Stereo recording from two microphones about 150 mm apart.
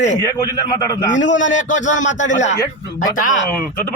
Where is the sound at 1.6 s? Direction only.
55° left (ahead or behind).